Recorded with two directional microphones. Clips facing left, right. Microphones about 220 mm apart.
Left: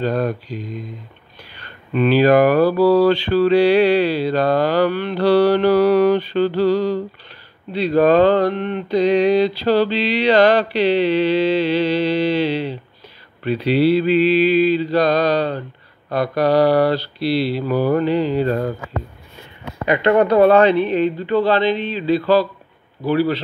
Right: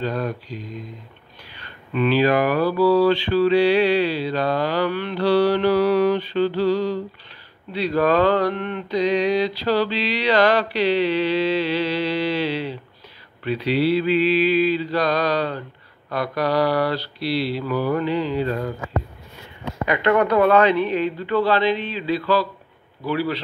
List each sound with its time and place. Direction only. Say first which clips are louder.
0.0 s mantra: left 5 dB; 50° left (ahead or behind)
2.0 s mantra: left 5 dB; 40° left (ahead or behind)
7.7 s a sound: left 5 dB; 25° left (ahead or behind)
13.7 s mantra: left 4 dB; centre (ahead or behind)
14.8 s a sound: left 5 dB; 25° left (ahead or behind)
17.2 s mantra: left 4 dB; centre (ahead or behind)
17.6 s mantra: left 5 dB; 35° left (ahead or behind)
19.9 s a sound: left 4 dB; 25° left (ahead or behind)
23.0 s mantra: left 6 dB; 30° left (ahead or behind)